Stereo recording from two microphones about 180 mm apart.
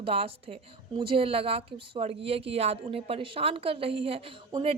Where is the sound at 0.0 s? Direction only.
35° right (ahead or behind).